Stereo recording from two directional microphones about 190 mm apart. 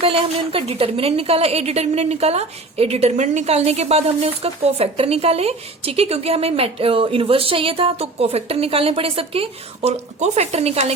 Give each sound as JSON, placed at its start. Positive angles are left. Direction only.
{"t": 0.0, "sound": "a woman's voice", "side_deg": -30}